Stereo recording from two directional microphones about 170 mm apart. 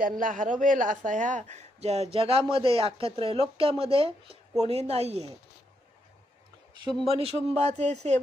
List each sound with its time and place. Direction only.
0.0 s a man's voice: 50° right (ahead or behind)
7.1 s a man's voice: 35° right (ahead or behind)